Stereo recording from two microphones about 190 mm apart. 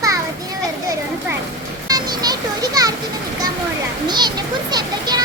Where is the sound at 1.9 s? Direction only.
20° right (ahead or behind).